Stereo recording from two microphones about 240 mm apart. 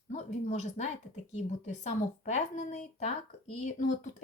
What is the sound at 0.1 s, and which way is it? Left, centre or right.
Speech, left.